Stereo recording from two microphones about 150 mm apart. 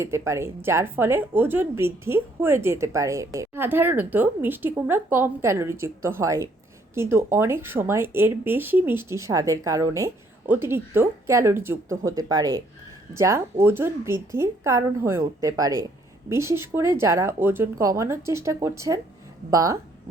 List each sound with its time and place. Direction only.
0.0 s a woman's voice: 15° right (ahead or behind)